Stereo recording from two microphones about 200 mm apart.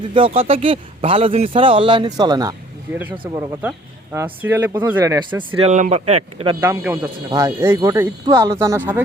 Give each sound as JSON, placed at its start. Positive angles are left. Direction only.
{"t": 0.1, "sound": "a man's voice", "side_deg": -30}
{"t": 6.6, "sound": "speech", "side_deg": -15}